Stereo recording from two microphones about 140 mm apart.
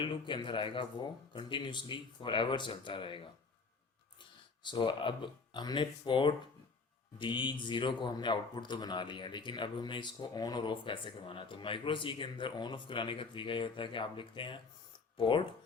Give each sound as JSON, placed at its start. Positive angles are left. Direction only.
{"t": 0.0, "sound": "speech", "side_deg": 35}
{"t": 4.6, "sound": "speech", "side_deg": 35}